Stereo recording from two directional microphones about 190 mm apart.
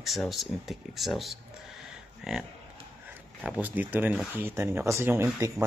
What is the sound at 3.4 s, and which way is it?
Speech, 5° right (ahead or behind).